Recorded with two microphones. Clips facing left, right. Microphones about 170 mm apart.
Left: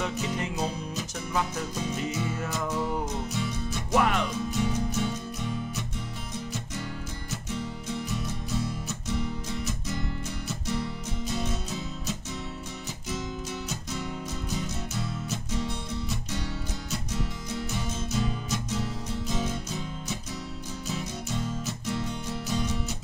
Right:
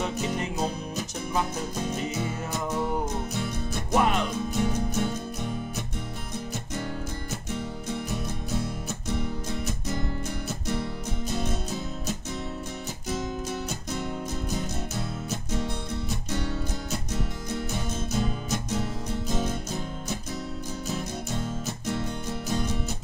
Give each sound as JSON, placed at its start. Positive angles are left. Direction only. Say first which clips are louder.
{"t": 0.1, "sound": "music", "louder": "right 2 dB", "side_deg": -55}
{"t": 1.8, "sound": "music", "louder": "right 1 dB", "side_deg": -55}
{"t": 3.9, "sound": "music", "louder": "right 1 dB", "side_deg": -20}
{"t": 4.5, "sound": "music", "louder": "right 1 dB", "side_deg": -50}
{"t": 7.5, "sound": "music", "louder": "right 1 dB", "side_deg": -50}